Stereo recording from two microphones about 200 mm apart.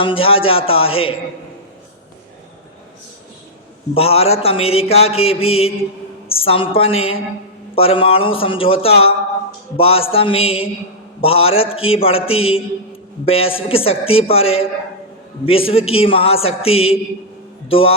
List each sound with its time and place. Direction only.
0.0 s mantra: 25° left (ahead or behind)
3.9 s mantra: 30° left (ahead or behind)
17.7 s speech: 25° left (ahead or behind)